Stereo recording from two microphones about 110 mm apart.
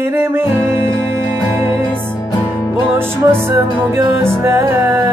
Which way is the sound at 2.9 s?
20° right (ahead or behind).